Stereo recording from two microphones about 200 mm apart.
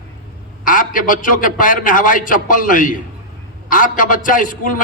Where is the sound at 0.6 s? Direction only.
40° left (ahead or behind).